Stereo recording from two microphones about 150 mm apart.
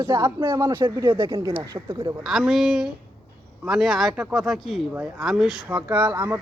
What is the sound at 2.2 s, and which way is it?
A man's voice, centre (ahead or behind).